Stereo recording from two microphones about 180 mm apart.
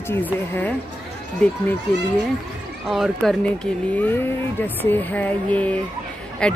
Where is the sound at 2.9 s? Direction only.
Centre (ahead or behind).